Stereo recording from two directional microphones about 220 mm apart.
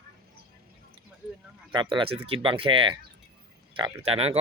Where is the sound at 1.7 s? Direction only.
20° right (ahead or behind).